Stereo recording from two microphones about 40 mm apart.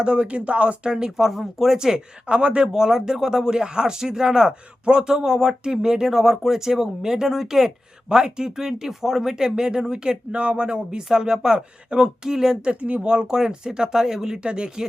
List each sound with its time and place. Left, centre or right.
0.0 s speech: right
0.9 s speech: centre
2.2 s speech: right
11.1 s speech: centre
12.6 s speech: right
13.1 s speech: centre
14.4 s speech: right